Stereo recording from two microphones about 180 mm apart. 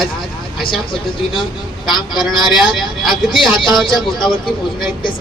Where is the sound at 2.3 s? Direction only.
Centre (ahead or behind).